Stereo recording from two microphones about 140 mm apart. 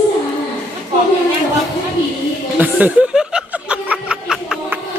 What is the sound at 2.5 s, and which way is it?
Snicker, 10° right (ahead or behind).